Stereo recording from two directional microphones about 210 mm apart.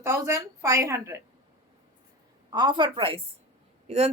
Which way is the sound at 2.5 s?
20° right (ahead or behind).